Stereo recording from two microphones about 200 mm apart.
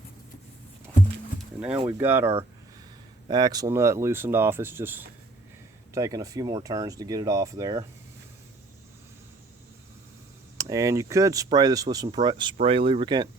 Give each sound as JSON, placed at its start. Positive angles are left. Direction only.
{"t": 1.9, "sound": "speech", "side_deg": -10}
{"t": 3.2, "sound": "speech", "side_deg": -20}
{"t": 10.6, "sound": "speech", "side_deg": -15}